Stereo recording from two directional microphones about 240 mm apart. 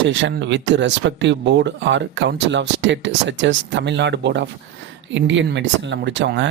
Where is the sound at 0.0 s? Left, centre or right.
Right.